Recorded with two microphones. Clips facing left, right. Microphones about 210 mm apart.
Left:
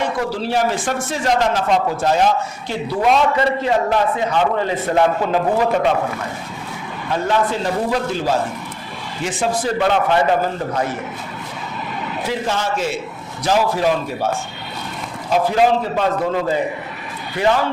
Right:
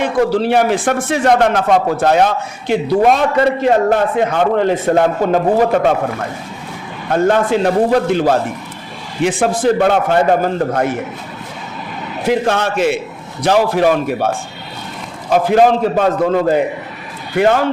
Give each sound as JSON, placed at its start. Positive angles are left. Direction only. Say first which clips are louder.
{"t": 0.3, "sound": "a man's voice", "louder": "right 6 dB", "side_deg": -60}
{"t": 7.1, "sound": "a man's voice", "louder": "right 6 dB", "side_deg": -55}
{"t": 9.7, "sound": "a man's voice", "louder": "right 4 dB", "side_deg": -45}
{"t": 12.3, "sound": "a man's voice", "louder": "right 7 dB", "side_deg": -65}
{"t": 15.3, "sound": "a man's voice", "louder": "right 4 dB", "side_deg": -50}